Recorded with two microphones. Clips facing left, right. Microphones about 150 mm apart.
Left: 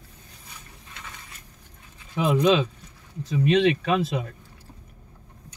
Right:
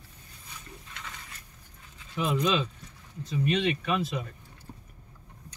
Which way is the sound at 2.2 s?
90° left.